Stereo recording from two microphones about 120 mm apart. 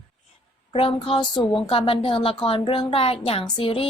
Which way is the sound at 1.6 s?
50° left (ahead or behind).